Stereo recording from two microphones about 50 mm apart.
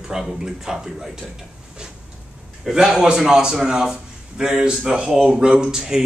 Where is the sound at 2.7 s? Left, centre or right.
Centre.